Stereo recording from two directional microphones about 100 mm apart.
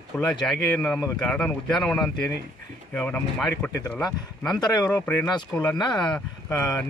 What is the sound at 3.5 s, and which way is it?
Speech, 35° left (ahead or behind).